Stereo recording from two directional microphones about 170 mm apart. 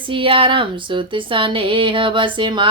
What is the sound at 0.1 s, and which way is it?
Speech, 30° right (ahead or behind).